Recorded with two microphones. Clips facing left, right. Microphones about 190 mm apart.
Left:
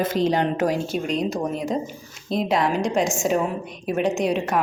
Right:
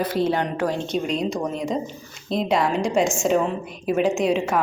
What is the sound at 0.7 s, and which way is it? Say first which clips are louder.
A woman's voice: even; centre (ahead or behind).